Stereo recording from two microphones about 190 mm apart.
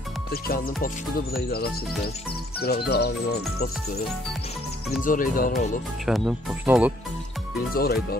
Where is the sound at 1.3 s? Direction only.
55° left (ahead or behind).